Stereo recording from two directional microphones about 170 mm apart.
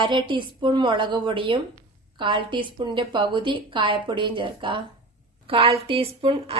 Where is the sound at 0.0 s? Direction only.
30° right (ahead or behind).